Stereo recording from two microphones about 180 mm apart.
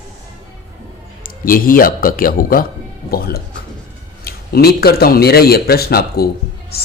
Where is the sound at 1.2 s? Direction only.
50° left (ahead or behind).